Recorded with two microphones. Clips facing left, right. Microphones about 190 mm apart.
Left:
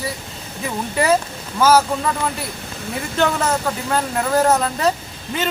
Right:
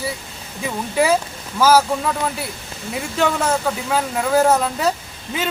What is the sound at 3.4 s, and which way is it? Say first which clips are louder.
Speech: right 1 dB; 5° right (ahead or behind).